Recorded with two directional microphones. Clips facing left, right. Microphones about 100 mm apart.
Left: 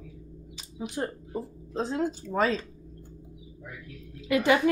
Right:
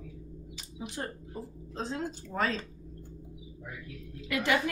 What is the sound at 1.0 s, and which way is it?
Speech, 15° left (ahead or behind).